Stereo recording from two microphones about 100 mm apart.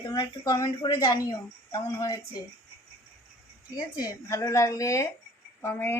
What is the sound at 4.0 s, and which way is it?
A woman's voice, 35° left (ahead or behind).